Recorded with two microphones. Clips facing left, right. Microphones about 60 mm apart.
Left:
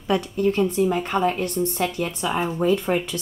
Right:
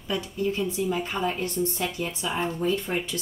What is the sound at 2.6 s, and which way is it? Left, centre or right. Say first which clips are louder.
Speech: left 8 dB; left.